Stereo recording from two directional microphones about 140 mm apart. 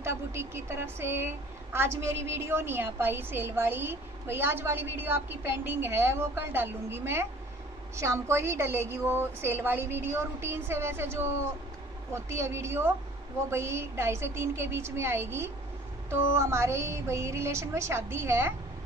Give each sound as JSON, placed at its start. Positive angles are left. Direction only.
{"t": 0.0, "sound": "a woman's voice", "side_deg": -20}